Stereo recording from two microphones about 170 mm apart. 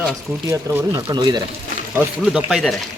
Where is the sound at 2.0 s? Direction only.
5° right (ahead or behind).